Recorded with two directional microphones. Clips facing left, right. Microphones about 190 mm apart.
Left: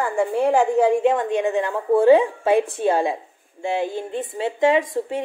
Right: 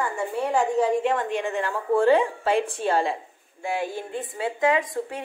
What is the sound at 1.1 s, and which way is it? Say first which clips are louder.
A woman's voice: left 5 dB; 20° left (ahead or behind).